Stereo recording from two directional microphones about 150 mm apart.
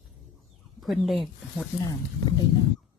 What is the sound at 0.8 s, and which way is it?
Speech, centre (ahead or behind).